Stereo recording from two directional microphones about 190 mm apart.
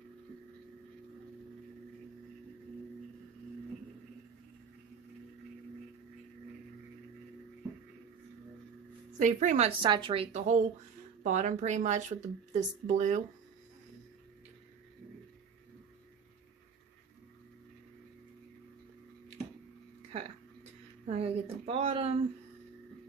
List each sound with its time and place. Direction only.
9.2 s speech: 40° right (ahead or behind)
9.7 s speech: 25° right (ahead or behind)
20.1 s a sound: 35° right (ahead or behind)
21.1 s speech: 30° right (ahead or behind)